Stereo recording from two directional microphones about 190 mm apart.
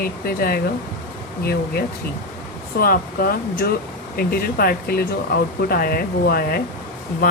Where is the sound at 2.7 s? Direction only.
50° left (ahead or behind).